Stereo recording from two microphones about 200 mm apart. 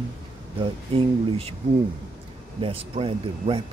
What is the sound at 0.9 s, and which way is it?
Speech, 30° right (ahead or behind).